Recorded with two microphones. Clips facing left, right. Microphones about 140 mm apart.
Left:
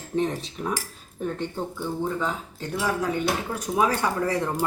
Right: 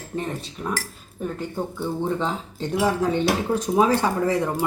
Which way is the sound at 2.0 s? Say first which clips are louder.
Right 3 dB; 30° right (ahead or behind).